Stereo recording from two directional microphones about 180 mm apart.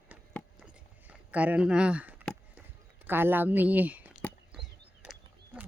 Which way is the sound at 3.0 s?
10° right (ahead or behind).